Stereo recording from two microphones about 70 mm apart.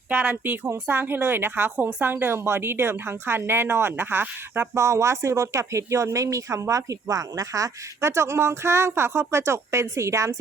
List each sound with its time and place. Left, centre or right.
0.1 s a woman's voice: right
4.7 s speech: right